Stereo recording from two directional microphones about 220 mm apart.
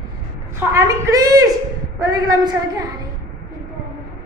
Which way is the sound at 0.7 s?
15° right (ahead or behind).